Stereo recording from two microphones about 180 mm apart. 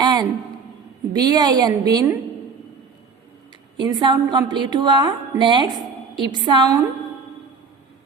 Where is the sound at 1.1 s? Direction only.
20° right (ahead or behind).